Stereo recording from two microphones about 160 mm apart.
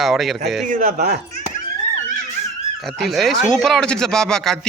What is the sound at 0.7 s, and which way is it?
Speech, 60° right (ahead or behind).